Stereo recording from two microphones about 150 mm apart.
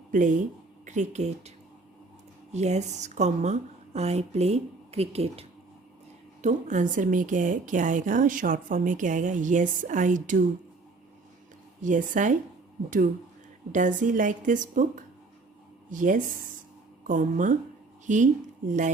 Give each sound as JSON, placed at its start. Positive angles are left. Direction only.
{"t": 0.1, "sound": "a woman's voice", "side_deg": -55}
{"t": 6.4, "sound": "a woman's voice", "side_deg": -55}
{"t": 11.8, "sound": "a woman's voice", "side_deg": -60}
{"t": 13.7, "sound": "a woman's voice", "side_deg": -55}